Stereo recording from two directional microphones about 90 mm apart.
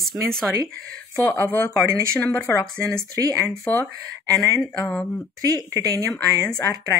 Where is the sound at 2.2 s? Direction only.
15° left (ahead or behind).